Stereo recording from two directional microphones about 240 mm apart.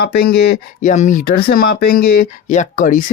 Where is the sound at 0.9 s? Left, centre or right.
Left.